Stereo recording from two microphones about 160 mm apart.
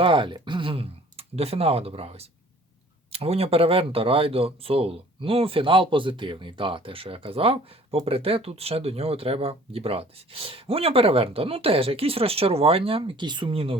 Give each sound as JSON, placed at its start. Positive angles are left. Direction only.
{"t": 0.0, "sound": "speech", "side_deg": -30}